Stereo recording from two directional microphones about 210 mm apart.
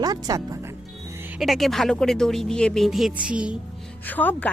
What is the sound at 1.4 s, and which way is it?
A woman's voice, centre (ahead or behind).